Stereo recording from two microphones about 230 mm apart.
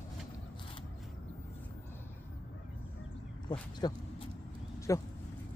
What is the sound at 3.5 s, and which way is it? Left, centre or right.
Speech, centre.